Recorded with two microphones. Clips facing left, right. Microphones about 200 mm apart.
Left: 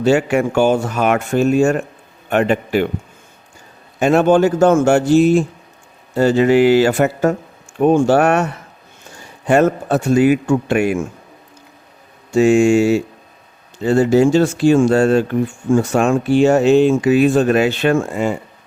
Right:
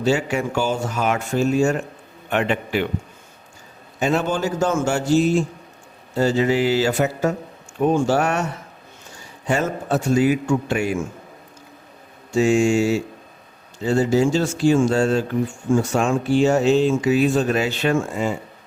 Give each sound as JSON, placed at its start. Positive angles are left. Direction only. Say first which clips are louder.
{"t": 0.0, "sound": "speech", "louder": "left 6 dB", "side_deg": 55}
{"t": 2.3, "sound": "a man's voice", "louder": "left 6 dB", "side_deg": 45}
{"t": 4.0, "sound": "speech", "louder": "left 9 dB", "side_deg": 55}
{"t": 9.5, "sound": "speech", "louder": "left 7 dB", "side_deg": 60}
{"t": 12.3, "sound": "speech", "louder": "left 5 dB", "side_deg": 60}